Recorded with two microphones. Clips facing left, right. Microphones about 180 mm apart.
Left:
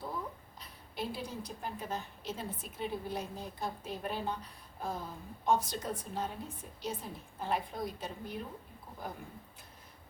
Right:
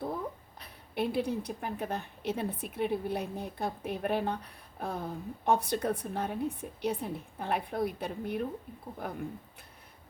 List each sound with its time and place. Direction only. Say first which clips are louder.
0.6 s a woman's voice: right 7 dB; 60° right (ahead or behind)